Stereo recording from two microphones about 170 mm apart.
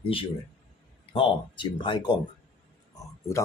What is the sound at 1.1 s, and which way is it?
Speech, 30° left (ahead or behind).